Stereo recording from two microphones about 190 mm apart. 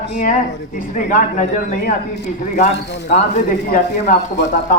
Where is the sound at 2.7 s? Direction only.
60° left (ahead or behind).